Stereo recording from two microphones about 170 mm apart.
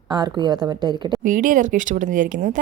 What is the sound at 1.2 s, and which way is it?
Speech, 50° right (ahead or behind).